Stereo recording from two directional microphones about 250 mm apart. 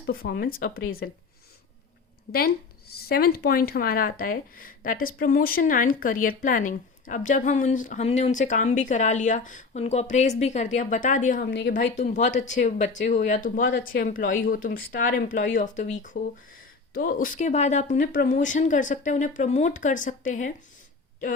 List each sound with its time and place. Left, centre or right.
0.0 s speech: left
2.3 s speech: left
11.8 s speech: left